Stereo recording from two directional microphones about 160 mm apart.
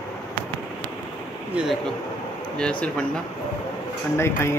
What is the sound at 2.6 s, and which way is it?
Speech, 5° left (ahead or behind).